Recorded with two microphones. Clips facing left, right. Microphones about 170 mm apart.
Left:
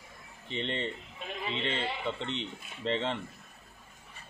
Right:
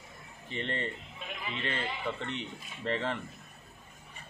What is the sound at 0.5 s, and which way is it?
Speech, 20° left (ahead or behind).